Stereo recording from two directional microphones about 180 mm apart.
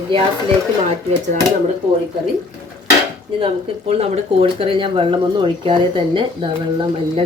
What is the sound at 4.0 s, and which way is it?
Speech, 30° right (ahead or behind).